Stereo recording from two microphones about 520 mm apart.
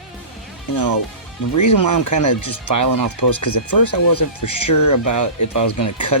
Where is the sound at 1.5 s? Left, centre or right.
Left.